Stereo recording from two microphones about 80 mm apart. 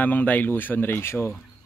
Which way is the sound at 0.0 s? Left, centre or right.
Left.